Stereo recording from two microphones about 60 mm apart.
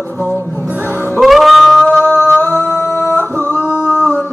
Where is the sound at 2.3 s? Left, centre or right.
Left.